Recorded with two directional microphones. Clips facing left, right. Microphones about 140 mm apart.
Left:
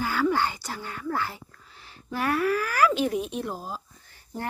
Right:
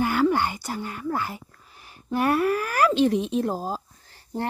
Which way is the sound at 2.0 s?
20° right (ahead or behind).